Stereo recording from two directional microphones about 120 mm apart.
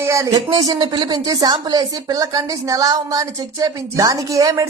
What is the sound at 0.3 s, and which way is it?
Speech, 35° right (ahead or behind).